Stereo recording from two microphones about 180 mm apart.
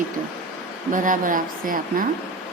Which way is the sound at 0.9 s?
45° right (ahead or behind).